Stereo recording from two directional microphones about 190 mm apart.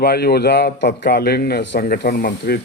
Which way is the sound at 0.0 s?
60° left (ahead or behind).